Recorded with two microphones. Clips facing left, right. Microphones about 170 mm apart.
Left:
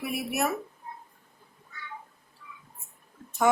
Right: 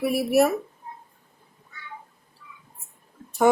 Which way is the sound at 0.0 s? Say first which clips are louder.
Right 9 dB; 35° right (ahead or behind).